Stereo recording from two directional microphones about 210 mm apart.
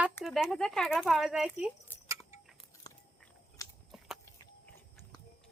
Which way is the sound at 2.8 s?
20° left (ahead or behind).